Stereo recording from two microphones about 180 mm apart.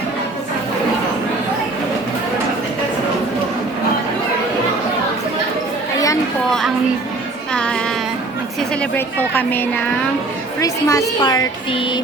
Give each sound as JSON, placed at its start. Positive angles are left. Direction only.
{"t": 7.5, "sound": "child singing", "side_deg": 5}
{"t": 8.8, "sound": "a woman's voice", "side_deg": 10}